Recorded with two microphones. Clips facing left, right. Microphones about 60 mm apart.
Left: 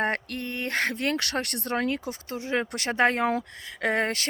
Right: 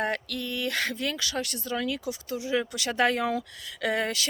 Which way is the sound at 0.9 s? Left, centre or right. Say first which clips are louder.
Left 3 dB; left.